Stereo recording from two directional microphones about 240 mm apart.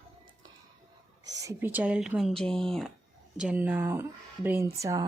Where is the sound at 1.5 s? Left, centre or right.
Centre.